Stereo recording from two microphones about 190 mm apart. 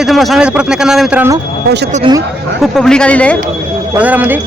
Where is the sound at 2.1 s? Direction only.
25° right (ahead or behind).